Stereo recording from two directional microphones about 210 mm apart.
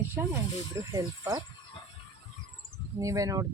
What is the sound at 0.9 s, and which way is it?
Speech, 15° right (ahead or behind).